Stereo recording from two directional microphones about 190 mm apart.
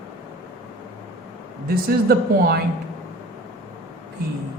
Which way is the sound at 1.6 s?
55° right (ahead or behind).